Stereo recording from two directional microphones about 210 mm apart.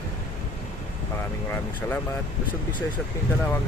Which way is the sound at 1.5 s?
10° left (ahead or behind).